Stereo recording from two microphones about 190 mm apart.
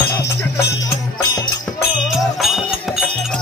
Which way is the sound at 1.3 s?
20° left (ahead or behind).